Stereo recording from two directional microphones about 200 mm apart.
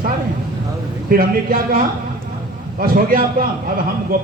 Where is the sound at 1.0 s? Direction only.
45° right (ahead or behind).